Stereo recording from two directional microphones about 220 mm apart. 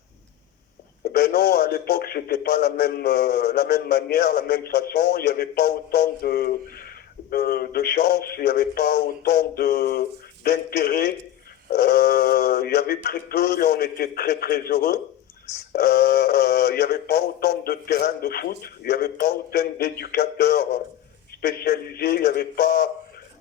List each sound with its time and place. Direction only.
1.1 s a man's voice: 45° left (ahead or behind)